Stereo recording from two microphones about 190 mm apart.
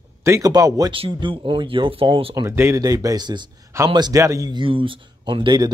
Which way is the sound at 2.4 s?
15° right (ahead or behind).